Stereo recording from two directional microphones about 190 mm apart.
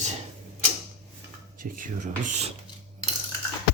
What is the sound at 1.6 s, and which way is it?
Speech, 45° right (ahead or behind).